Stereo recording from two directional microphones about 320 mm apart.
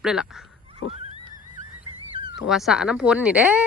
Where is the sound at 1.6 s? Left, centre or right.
Right.